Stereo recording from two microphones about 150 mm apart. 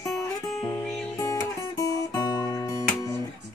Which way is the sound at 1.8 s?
25° left (ahead or behind).